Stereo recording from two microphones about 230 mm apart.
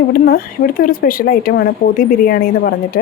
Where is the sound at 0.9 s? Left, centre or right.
Left.